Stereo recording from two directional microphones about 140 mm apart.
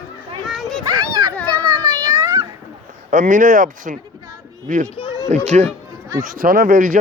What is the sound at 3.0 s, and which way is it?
Speech, 70° right (ahead or behind).